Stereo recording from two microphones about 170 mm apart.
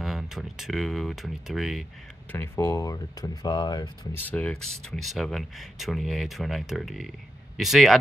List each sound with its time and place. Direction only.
0.0 s speech: centre (ahead or behind)
2.3 s speech: 15° left (ahead or behind)
4.2 s speech: 10° left (ahead or behind)